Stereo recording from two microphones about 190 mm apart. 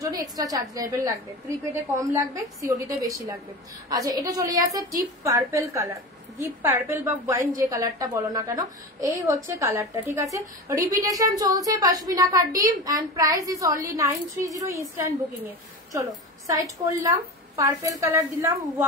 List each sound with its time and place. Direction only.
0.2 s a woman's voice: 20° right (ahead or behind)